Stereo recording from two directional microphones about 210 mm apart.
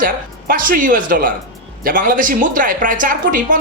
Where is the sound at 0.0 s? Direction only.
40° right (ahead or behind).